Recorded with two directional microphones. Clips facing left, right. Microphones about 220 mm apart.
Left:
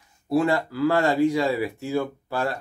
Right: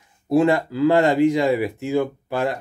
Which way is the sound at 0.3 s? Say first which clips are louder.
Right 4 dB; 20° right (ahead or behind).